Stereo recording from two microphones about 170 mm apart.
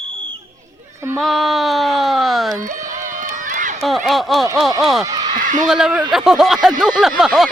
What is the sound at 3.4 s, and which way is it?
Run, 50° right (ahead or behind).